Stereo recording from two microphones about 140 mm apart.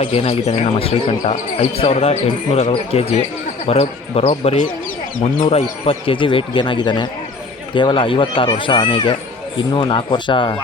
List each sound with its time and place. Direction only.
0.0 s speech: 45° left (ahead or behind)